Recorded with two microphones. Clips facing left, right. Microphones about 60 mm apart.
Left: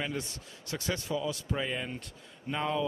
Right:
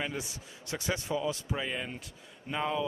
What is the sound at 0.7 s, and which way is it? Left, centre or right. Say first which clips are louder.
Speech: right 1 dB; centre.